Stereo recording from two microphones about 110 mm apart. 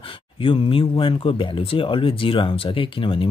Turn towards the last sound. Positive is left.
turn(degrees=50)  # may be behind; listen again after turning